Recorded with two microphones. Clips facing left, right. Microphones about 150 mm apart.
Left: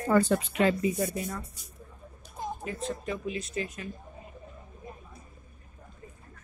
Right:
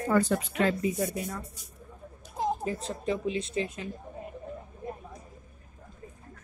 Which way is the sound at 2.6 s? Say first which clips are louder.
Right 1 dB; 30° right (ahead or behind).